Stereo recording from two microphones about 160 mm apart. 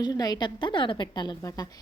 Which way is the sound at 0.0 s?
25° left (ahead or behind).